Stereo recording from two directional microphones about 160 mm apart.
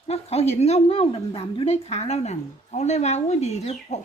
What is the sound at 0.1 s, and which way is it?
A woman's voice, 40° left (ahead or behind).